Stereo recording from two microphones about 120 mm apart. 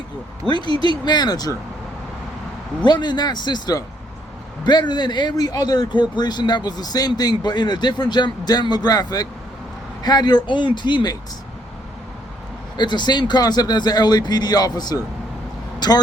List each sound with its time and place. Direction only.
0.4 s speech: 40° left (ahead or behind)
0.7 s speech: 45° right (ahead or behind)
1.0 s speech: 35° left (ahead or behind)
2.8 s speech: 40° left (ahead or behind)
12.7 s speech: 40° left (ahead or behind)